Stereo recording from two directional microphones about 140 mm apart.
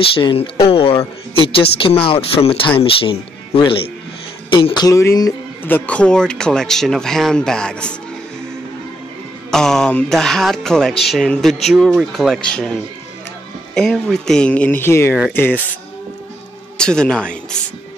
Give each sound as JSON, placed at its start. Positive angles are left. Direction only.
{"t": 0.0, "sound": "speech", "side_deg": 40}
{"t": 4.5, "sound": "a sound", "side_deg": 35}
{"t": 5.6, "sound": "speech", "side_deg": 15}
{"t": 9.5, "sound": "speech", "side_deg": 5}
{"t": 13.7, "sound": "speech", "side_deg": 5}
{"t": 16.7, "sound": "a man's voice", "side_deg": 5}